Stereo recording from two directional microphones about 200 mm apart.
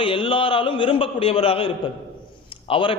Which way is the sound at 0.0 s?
25° left (ahead or behind).